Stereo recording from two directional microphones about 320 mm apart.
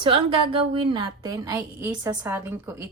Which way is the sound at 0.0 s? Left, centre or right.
Centre.